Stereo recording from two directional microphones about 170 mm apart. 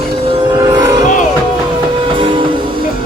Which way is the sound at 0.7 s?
25° right (ahead or behind).